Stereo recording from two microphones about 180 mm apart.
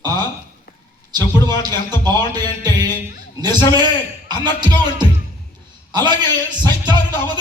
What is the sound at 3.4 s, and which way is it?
Speech, 25° right (ahead or behind).